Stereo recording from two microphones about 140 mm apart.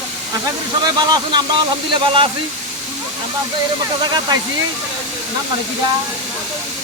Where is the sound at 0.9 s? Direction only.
30° right (ahead or behind).